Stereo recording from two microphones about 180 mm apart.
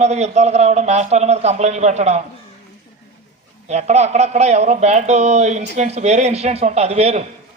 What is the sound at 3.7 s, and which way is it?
Speech, 40° right (ahead or behind).